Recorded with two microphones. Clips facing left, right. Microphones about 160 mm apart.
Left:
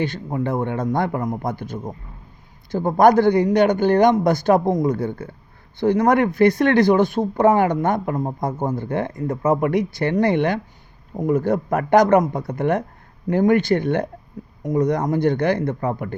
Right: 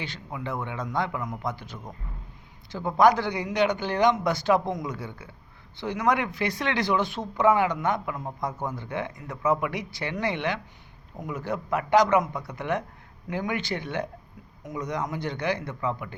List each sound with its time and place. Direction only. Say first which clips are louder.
0.0 s speech: left 12 dB; 45° left (ahead or behind)